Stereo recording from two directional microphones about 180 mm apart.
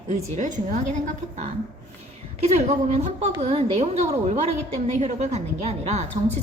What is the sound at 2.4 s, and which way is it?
A woman's voice, 35° right (ahead or behind).